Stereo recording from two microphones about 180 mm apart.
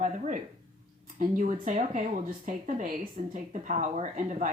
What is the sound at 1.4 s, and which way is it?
Speech, 45° right (ahead or behind).